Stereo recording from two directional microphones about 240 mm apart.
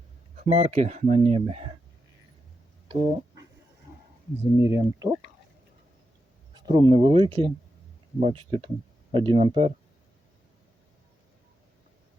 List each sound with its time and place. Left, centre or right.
0.3 s speech: right
2.9 s a sound: centre
4.5 s speech: centre
6.5 s speech: centre